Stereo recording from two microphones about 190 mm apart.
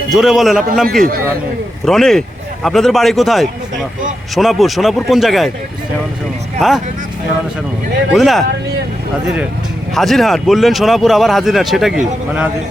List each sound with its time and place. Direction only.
0.1 s speech: centre (ahead or behind)
6.6 s speech: centre (ahead or behind)
8.1 s speech: centre (ahead or behind)